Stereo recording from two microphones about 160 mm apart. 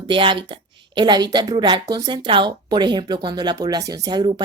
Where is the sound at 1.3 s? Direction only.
25° right (ahead or behind).